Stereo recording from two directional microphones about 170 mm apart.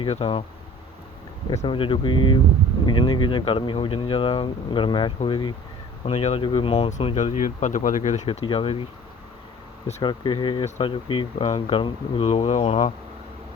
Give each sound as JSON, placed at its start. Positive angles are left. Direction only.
{"t": 0.0, "sound": "speech", "side_deg": 35}
{"t": 1.5, "sound": "speech", "side_deg": 30}
{"t": 10.0, "sound": "speech", "side_deg": 25}